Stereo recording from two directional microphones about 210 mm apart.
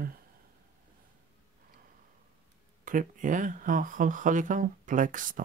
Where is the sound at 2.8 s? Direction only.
40° right (ahead or behind).